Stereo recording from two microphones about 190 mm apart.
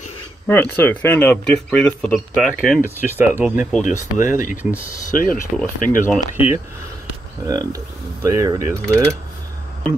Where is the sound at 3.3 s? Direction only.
10° right (ahead or behind).